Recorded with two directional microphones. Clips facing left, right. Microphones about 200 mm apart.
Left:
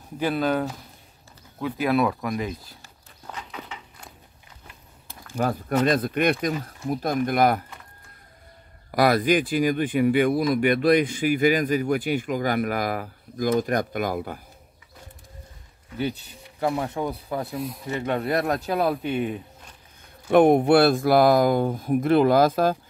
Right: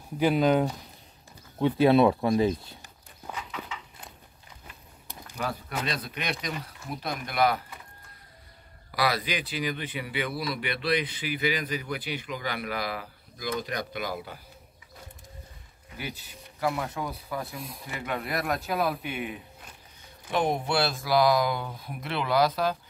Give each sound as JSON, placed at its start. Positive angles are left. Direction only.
{"t": 0.2, "sound": "speech", "side_deg": -15}
{"t": 5.3, "sound": "speech", "side_deg": 50}
{"t": 8.9, "sound": "speech", "side_deg": 50}
{"t": 16.5, "sound": "speech", "side_deg": 30}
{"t": 20.0, "sound": "speech", "side_deg": 55}